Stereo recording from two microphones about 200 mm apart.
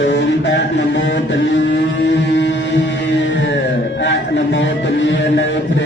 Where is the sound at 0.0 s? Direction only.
65° left (ahead or behind).